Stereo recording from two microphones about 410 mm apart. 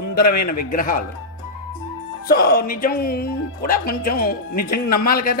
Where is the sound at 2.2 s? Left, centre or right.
Left.